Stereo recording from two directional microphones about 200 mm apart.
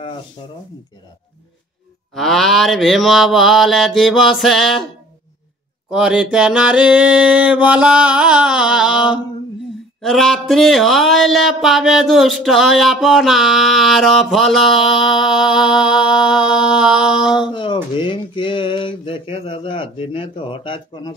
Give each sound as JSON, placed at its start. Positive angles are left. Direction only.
{"t": 2.1, "sound": "speech", "side_deg": 0}
{"t": 5.9, "sound": "speech", "side_deg": -5}
{"t": 17.5, "sound": "a sound", "side_deg": 25}